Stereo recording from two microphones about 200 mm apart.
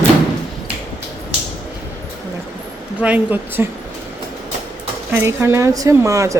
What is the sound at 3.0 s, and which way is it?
Speech, 5° right (ahead or behind).